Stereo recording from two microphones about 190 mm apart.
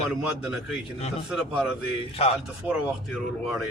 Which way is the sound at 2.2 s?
30° left (ahead or behind).